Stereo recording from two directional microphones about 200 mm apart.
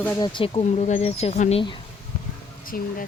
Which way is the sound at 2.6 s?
45° left (ahead or behind).